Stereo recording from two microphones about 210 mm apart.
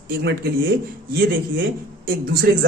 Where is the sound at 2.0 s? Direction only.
45° right (ahead or behind).